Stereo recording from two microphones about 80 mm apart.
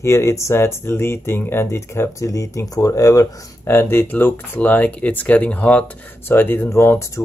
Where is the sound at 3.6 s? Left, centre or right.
Left.